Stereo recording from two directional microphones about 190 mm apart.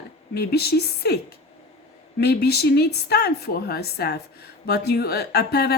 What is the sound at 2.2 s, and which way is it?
A woman's voice, 55° left (ahead or behind).